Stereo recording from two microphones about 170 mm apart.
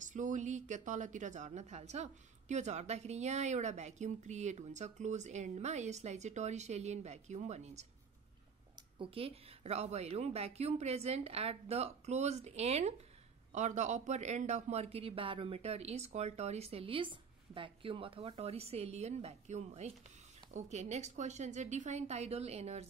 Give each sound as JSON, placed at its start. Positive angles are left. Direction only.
{"t": 0.0, "sound": "a woman's voice", "side_deg": -50}
{"t": 8.9, "sound": "a man's voice", "side_deg": -30}